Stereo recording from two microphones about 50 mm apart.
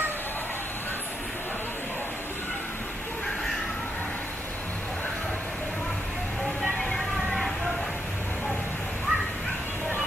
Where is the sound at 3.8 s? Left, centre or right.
Left.